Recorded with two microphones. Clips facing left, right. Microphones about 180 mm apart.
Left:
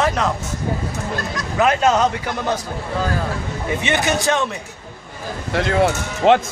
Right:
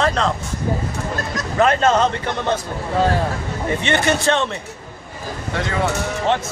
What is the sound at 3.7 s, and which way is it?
Speech, 5° left (ahead or behind).